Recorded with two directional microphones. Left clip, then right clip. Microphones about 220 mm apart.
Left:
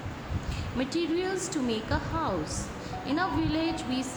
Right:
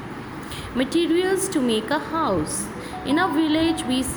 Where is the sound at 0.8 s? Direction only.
30° right (ahead or behind).